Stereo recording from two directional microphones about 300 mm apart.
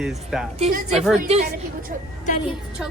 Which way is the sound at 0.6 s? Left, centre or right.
Right.